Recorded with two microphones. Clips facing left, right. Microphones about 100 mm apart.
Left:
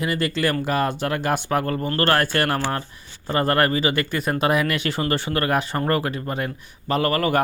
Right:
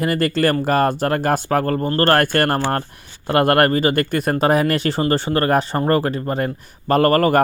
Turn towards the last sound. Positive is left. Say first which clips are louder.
# right 6 dB
turn(degrees=-45)  # may be behind; listen again after turning